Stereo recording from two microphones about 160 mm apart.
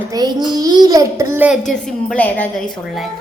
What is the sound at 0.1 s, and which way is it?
A child's voice, 25° right (ahead or behind).